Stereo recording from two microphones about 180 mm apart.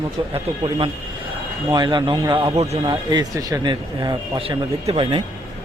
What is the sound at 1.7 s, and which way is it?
Speech, 25° right (ahead or behind).